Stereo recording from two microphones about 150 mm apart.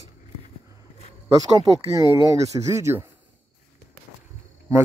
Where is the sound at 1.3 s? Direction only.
25° right (ahead or behind).